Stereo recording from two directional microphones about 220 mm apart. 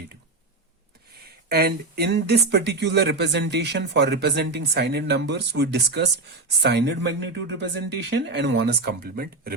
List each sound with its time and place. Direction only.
1.5 s speech: 45° right (ahead or behind)